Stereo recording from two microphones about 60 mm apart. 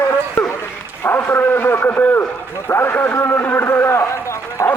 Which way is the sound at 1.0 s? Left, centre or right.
Left.